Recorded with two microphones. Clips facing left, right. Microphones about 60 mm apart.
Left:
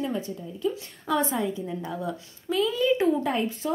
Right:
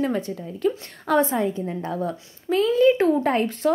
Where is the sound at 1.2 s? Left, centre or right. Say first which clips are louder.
Right 6 dB; right.